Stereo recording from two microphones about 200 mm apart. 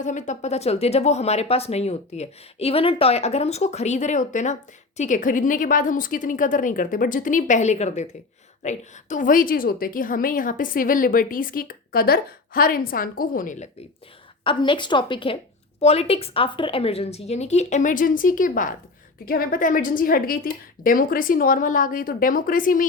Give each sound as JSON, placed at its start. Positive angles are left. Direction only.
{"t": 0.0, "sound": "a woman's voice", "side_deg": 35}
{"t": 14.4, "sound": "a woman's voice", "side_deg": 25}